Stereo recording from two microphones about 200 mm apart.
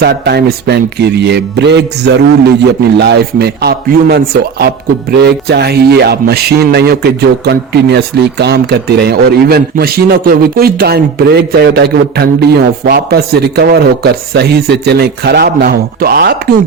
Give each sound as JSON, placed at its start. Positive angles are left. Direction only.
{"t": 0.0, "sound": "music", "side_deg": -55}
{"t": 3.0, "sound": "a man's voice", "side_deg": -55}